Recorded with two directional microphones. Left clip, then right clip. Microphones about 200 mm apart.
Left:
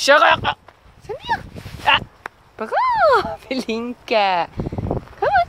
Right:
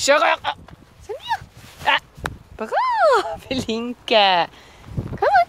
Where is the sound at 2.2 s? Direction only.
50° right (ahead or behind).